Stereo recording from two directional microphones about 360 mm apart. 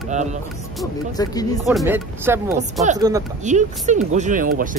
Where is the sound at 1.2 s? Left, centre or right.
Centre.